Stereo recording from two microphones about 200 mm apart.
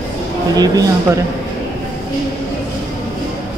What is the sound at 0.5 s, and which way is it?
Speech, 20° right (ahead or behind).